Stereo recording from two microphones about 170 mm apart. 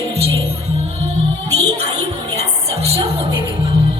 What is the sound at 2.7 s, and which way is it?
Music, 35° right (ahead or behind).